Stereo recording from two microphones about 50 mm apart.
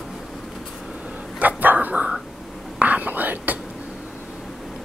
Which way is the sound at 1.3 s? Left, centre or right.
Right.